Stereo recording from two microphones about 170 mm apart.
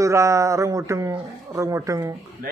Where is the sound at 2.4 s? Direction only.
60° right (ahead or behind).